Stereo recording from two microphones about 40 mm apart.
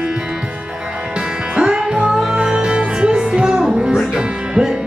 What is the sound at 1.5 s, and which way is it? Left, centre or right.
Music, centre.